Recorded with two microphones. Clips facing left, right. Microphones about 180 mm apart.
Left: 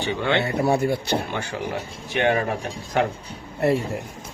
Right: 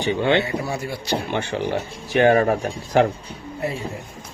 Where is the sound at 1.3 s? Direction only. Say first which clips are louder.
Right 5 dB; 25° right (ahead or behind).